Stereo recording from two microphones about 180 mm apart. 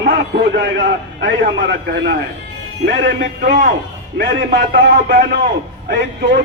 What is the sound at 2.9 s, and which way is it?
A man's voice, 60° right (ahead or behind).